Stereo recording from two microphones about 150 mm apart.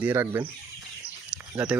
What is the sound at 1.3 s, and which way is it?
Bird, 10° right (ahead or behind).